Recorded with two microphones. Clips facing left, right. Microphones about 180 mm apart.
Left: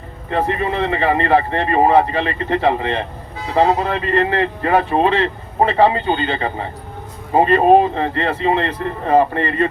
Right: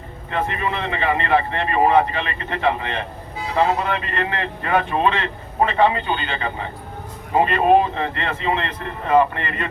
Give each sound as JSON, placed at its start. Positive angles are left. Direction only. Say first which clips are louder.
{"t": 0.3, "sound": "speech", "louder": "left 5 dB", "side_deg": 35}